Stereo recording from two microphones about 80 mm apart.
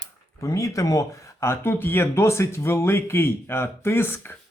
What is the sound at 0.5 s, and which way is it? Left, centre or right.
Speech, left.